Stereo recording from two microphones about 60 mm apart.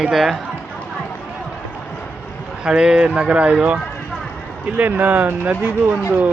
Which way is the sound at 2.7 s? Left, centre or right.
Centre.